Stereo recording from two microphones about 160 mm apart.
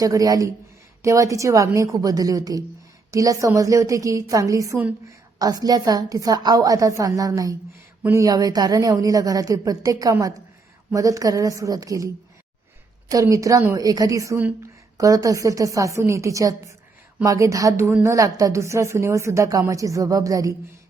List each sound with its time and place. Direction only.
0.0 s a woman's voice: 20° right (ahead or behind)